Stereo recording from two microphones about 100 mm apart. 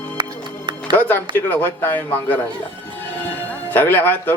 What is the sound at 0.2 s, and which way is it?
Music, 50° right (ahead or behind).